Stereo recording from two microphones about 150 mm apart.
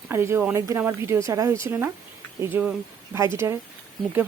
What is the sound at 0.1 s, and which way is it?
A woman's voice, 15° right (ahead or behind).